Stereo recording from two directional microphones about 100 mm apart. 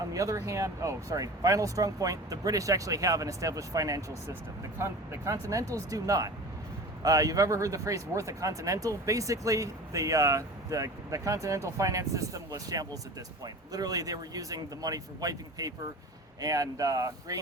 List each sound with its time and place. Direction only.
0.1 s speech: 35° right (ahead or behind)